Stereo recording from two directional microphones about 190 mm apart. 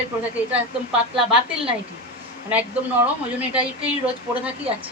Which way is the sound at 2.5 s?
10° right (ahead or behind).